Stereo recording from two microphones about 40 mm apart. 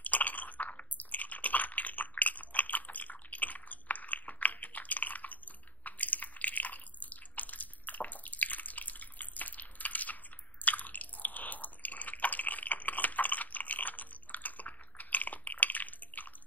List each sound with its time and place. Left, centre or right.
0.0 s chewing: left
10.6 s drip: left